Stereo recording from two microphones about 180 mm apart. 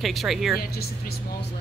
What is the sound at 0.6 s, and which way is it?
Speech, 60° left (ahead or behind).